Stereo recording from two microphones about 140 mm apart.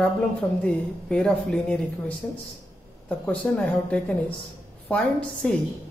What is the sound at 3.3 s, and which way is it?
A woman's voice, 5° left (ahead or behind).